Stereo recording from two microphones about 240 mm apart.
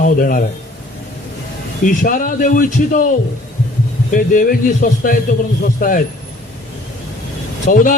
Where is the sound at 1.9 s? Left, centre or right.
Left.